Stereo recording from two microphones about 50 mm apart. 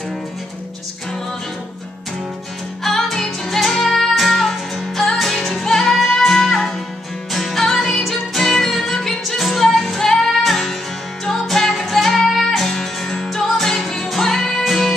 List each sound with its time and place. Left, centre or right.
2.8 s music: centre